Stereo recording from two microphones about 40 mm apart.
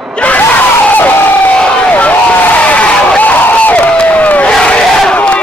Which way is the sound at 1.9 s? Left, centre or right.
Left.